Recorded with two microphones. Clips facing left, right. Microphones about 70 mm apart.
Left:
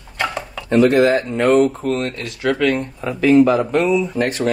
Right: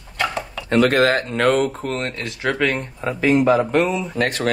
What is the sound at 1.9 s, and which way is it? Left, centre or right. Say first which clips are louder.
Speech: left 4 dB; right.